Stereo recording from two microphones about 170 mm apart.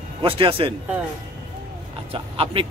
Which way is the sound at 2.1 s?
35° right (ahead or behind).